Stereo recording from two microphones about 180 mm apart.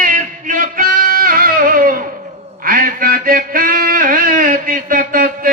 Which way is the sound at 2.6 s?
50° right (ahead or behind).